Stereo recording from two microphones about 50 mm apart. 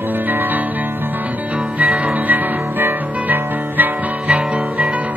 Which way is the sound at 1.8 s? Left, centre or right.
Right.